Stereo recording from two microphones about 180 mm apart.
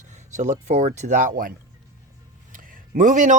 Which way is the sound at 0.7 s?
40° right (ahead or behind).